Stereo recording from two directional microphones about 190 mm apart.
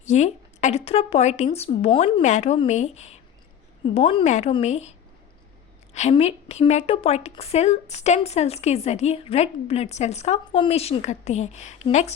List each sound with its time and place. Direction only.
0.0 s a sound: 35° left (ahead or behind)
0.9 s a woman's voice: 35° left (ahead or behind)
2.2 s a woman's voice: 35° left (ahead or behind)